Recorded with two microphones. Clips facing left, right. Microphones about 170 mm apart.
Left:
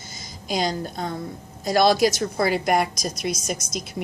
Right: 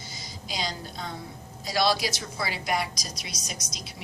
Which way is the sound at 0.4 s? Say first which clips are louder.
Left 9 dB; 50° left (ahead or behind).